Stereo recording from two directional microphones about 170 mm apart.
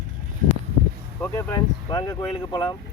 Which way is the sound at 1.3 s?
20° left (ahead or behind).